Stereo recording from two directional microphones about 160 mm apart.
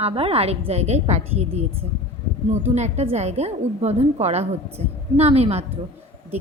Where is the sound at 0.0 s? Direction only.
35° right (ahead or behind).